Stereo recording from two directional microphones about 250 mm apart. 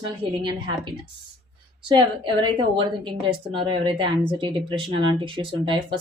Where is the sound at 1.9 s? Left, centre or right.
Centre.